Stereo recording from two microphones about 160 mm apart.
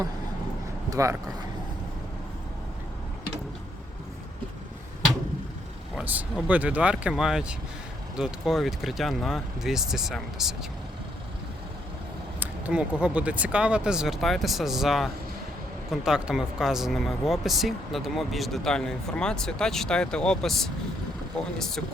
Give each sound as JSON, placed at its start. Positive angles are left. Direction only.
{"t": 0.9, "sound": "speech", "side_deg": -20}
{"t": 6.0, "sound": "speech", "side_deg": -5}
{"t": 12.4, "sound": "a sound", "side_deg": -10}
{"t": 13.0, "sound": "speech", "side_deg": -10}